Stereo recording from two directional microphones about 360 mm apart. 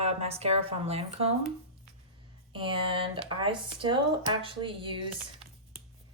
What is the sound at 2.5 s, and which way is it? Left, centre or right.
A woman's voice, centre.